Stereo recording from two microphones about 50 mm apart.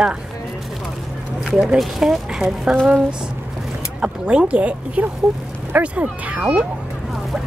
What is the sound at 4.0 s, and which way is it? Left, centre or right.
Speech, centre.